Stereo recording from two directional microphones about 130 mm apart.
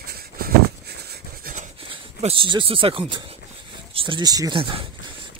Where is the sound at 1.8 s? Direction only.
40° right (ahead or behind).